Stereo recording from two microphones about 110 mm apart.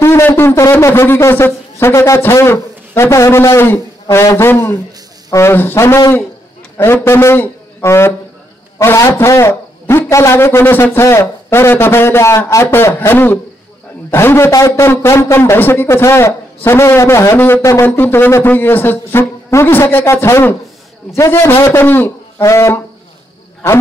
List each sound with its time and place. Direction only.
0.0 s a man's voice: 25° left (ahead or behind)